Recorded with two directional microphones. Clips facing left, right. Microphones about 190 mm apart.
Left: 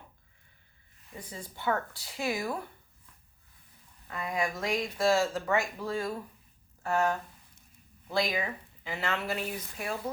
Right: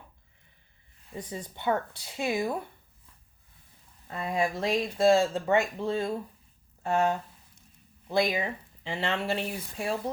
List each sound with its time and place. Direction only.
1.1 s speech: 25° right (ahead or behind)
4.1 s speech: 30° right (ahead or behind)